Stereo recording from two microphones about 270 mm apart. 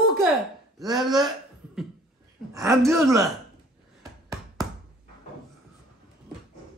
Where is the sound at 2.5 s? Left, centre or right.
Centre.